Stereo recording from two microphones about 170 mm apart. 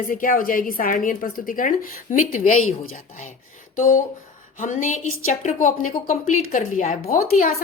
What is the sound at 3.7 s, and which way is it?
A woman's voice, 50° left (ahead or behind).